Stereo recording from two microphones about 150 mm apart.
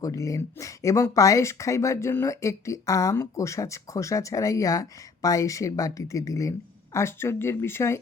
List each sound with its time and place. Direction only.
0.0 s speech: 20° left (ahead or behind)